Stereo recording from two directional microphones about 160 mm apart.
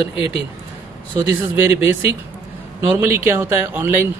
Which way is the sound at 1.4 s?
10° right (ahead or behind).